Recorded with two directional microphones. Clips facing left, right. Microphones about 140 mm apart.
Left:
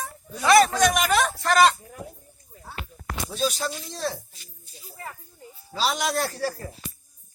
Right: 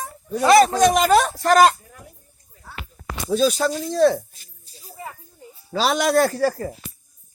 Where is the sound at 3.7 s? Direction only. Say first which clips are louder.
Right 13 dB; 45° right (ahead or behind).